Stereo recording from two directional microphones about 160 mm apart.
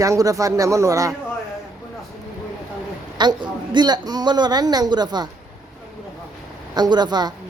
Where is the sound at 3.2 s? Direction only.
30° right (ahead or behind).